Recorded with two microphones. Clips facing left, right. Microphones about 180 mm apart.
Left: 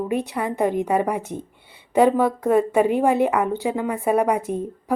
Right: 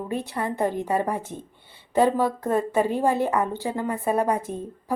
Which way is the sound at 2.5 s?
15° left (ahead or behind).